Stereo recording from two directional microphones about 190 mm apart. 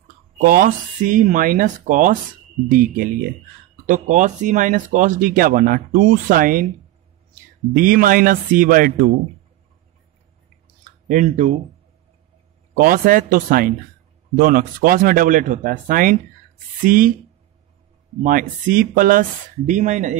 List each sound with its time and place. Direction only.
0.4 s speech: 50° right (ahead or behind)
7.7 s speech: 45° right (ahead or behind)
10.8 s a sound: 45° right (ahead or behind)
12.7 s speech: 45° right (ahead or behind)
18.2 s speech: 45° right (ahead or behind)